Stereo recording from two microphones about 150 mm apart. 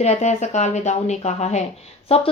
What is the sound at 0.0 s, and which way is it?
A woman's voice, 50° left (ahead or behind).